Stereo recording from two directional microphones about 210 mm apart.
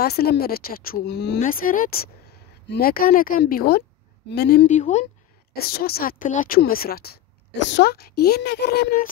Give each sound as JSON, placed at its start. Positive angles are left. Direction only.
{"t": 0.0, "sound": "speech", "side_deg": 50}
{"t": 1.4, "sound": "speech", "side_deg": 40}
{"t": 4.6, "sound": "speech", "side_deg": 35}
{"t": 5.5, "sound": "speech", "side_deg": 45}